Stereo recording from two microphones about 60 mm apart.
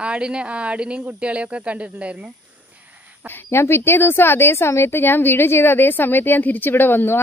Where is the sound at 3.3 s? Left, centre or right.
Left.